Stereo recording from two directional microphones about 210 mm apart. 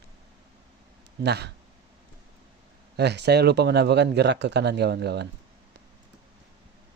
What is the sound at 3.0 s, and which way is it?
Speech, 55° right (ahead or behind).